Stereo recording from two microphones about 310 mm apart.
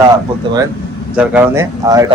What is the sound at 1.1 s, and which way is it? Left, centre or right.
Speech, centre.